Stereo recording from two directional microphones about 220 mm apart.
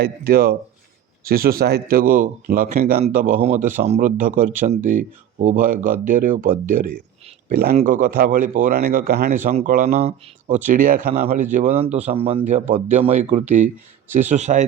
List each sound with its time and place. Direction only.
0.0 s speech: 40° right (ahead or behind)